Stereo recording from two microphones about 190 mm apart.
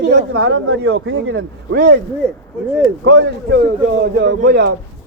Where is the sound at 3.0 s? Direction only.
70° right (ahead or behind).